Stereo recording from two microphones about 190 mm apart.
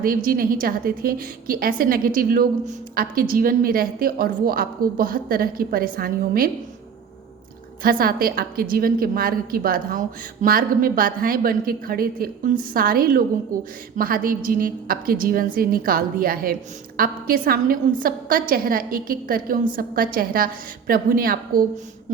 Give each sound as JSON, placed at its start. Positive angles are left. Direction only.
{"t": 0.0, "sound": "a woman's voice", "side_deg": -50}
{"t": 7.8, "sound": "a woman's voice", "side_deg": -50}